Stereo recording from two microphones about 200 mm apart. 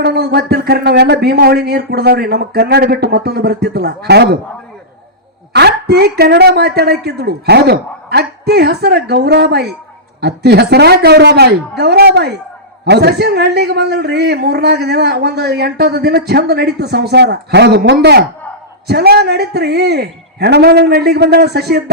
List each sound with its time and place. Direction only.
0.0 s speech: 55° right (ahead or behind)
5.5 s a man's voice: 55° right (ahead or behind)